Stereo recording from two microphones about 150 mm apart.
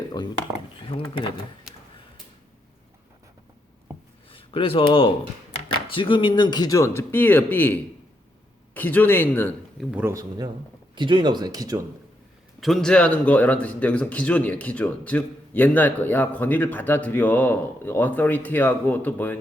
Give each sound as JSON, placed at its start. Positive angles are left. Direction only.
{"t": 0.2, "sound": "speech", "side_deg": 30}
{"t": 4.3, "sound": "speech", "side_deg": 35}
{"t": 9.9, "sound": "speech", "side_deg": -15}
{"t": 12.5, "sound": "speech", "side_deg": 0}